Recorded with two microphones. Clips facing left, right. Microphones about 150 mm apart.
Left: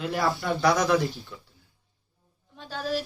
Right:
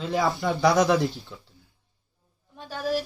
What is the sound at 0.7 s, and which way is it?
Speech, 20° right (ahead or behind).